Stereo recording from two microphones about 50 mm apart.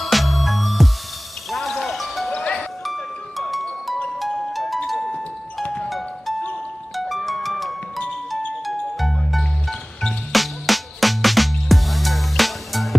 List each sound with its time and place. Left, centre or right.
0.0 s music: centre
2.3 s music: left
2.8 s music: centre